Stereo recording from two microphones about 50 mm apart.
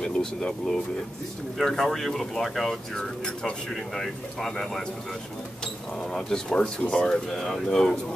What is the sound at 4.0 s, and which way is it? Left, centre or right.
Speech, centre.